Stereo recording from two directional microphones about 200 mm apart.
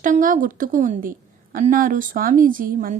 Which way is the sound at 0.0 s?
40° right (ahead or behind).